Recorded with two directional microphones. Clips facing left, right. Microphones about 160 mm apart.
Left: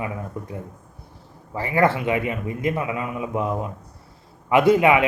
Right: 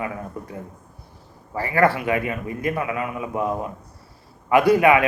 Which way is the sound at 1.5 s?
20° left (ahead or behind).